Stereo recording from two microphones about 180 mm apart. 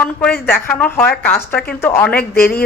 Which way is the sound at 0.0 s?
5° left (ahead or behind).